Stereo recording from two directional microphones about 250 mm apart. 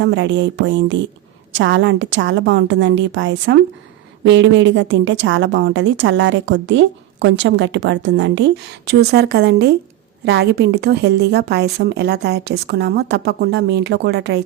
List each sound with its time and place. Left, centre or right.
0.0 s a woman's voice: right